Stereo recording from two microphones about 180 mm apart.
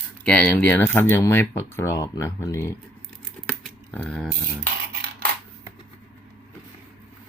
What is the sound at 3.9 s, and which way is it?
Speech, 10° left (ahead or behind).